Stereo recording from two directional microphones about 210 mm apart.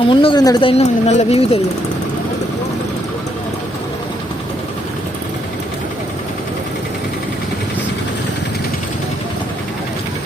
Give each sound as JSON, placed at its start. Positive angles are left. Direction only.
{"t": 0.0, "sound": "speech", "side_deg": 25}